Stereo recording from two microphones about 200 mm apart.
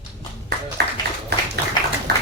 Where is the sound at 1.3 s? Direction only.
55° right (ahead or behind).